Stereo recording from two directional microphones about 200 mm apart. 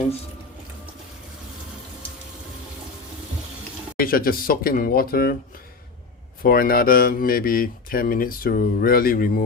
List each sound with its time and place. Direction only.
3.9 s speech: 45° left (ahead or behind)
6.4 s speech: 45° left (ahead or behind)